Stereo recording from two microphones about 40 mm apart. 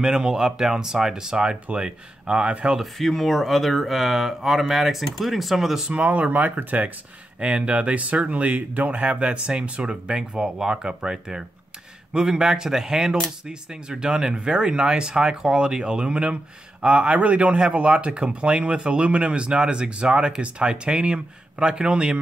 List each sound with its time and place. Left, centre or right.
0.0 s speech: centre
2.8 s speech: centre
5.9 s speech: right
7.3 s speech: right